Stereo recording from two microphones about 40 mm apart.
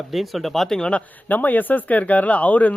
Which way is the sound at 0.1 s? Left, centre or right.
Centre.